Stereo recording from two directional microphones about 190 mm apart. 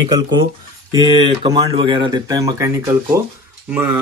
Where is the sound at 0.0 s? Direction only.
25° right (ahead or behind).